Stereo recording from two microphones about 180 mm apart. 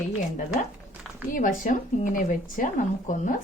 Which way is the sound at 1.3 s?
50° left (ahead or behind).